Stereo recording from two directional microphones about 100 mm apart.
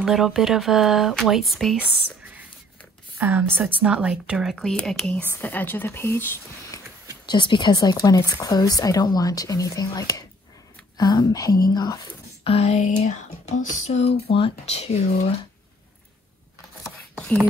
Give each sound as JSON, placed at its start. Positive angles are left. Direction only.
{"t": 0.0, "sound": "speech", "side_deg": -5}
{"t": 3.2, "sound": "a woman's voice", "side_deg": -20}
{"t": 4.6, "sound": "speech", "side_deg": 5}
{"t": 5.4, "sound": "speech", "side_deg": 20}
{"t": 7.2, "sound": "a woman's voice", "side_deg": 50}
{"t": 12.4, "sound": "a sound", "side_deg": 90}
{"t": 13.5, "sound": "speech", "side_deg": 90}